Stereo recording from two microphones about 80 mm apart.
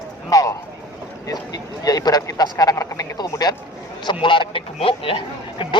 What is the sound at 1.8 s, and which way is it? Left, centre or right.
Speech, left.